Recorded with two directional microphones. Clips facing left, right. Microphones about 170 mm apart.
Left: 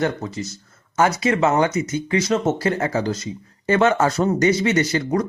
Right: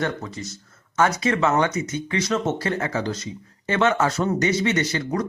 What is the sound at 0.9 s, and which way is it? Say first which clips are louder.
Speech: left 2 dB; 30° left (ahead or behind).